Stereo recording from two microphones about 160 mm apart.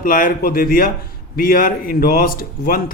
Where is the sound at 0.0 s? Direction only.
60° left (ahead or behind).